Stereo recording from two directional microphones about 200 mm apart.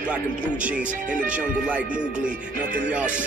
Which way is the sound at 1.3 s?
5° right (ahead or behind).